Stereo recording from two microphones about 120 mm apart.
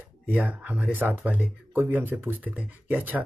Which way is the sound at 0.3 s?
15° right (ahead or behind).